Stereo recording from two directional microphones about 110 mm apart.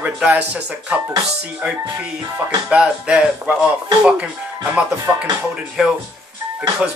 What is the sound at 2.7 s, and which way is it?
Speech, 10° right (ahead or behind).